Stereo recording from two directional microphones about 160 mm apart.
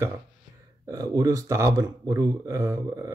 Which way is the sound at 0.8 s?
20° right (ahead or behind).